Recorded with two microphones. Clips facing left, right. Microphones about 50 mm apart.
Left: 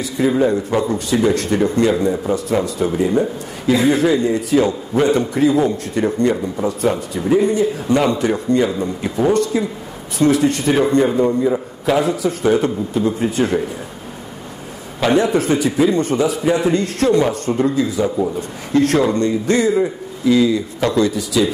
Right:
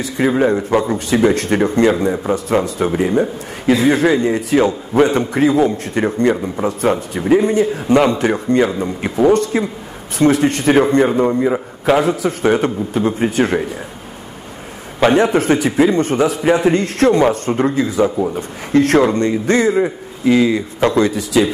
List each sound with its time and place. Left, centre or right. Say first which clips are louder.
0.4 s a man's voice: right 2 dB; right
15.0 s a man's voice: right 3 dB; right
15.4 s a man's voice: right 2 dB; right